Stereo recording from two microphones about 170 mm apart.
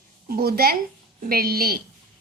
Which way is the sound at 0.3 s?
65° right (ahead or behind).